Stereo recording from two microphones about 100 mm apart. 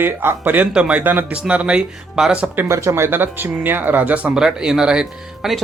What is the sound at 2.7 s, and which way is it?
Speech, 30° right (ahead or behind).